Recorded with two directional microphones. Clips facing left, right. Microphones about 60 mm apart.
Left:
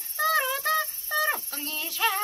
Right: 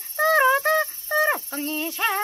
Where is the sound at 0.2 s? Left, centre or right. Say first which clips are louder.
Right 7 dB; right.